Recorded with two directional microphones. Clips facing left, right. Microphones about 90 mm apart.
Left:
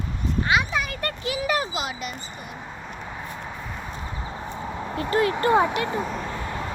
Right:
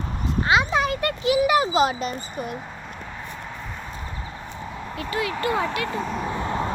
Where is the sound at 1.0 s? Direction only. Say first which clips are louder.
Right 7 dB; 20° right (ahead or behind).